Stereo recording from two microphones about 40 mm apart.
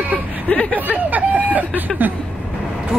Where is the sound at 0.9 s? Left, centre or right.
Right.